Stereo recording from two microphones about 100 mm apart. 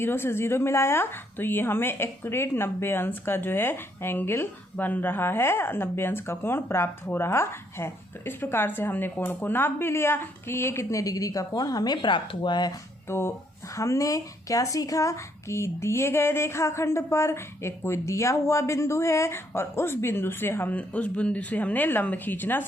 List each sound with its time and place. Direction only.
0.0 s a woman's voice: 25° left (ahead or behind); by 12.7 s 50° left (ahead or behind)
13.1 s a woman's voice: 25° left (ahead or behind)